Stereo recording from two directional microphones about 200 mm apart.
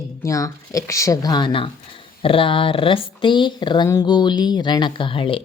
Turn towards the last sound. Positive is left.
turn(degrees=25)  # may be behind; listen again after turning